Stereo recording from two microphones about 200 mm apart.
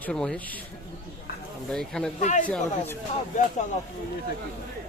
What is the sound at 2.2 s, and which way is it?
Speech, 35° left (ahead or behind).